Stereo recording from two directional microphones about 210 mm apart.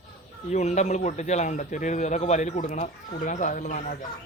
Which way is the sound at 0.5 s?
35° left (ahead or behind).